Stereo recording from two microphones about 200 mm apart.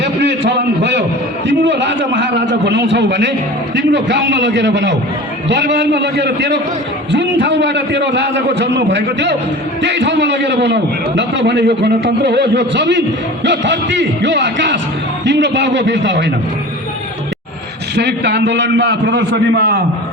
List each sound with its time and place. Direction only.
0.0 s a sound: 60° right (ahead or behind)
1.5 s a man's voice: 60° right (ahead or behind)
17.9 s a man's voice: 60° right (ahead or behind)